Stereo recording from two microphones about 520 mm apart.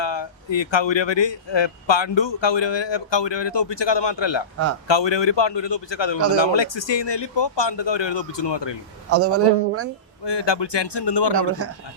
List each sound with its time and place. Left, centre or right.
0.0 s a man's voice: left
9.0 s a man's voice: right
10.2 s a man's voice: left
11.6 s a man's voice: right